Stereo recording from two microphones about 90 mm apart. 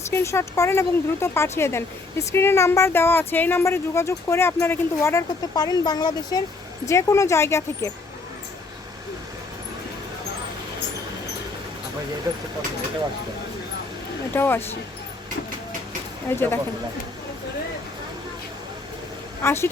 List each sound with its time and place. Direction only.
0.1 s speech: 30° left (ahead or behind)
5.5 s speech: 45° left (ahead or behind)
6.8 s speech: 35° left (ahead or behind)
14.3 s speech: 25° left (ahead or behind)
16.3 s speech: 30° left (ahead or behind)
19.4 s speech: 25° left (ahead or behind)